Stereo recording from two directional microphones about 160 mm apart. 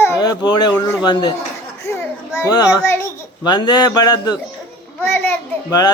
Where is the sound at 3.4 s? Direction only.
25° left (ahead or behind).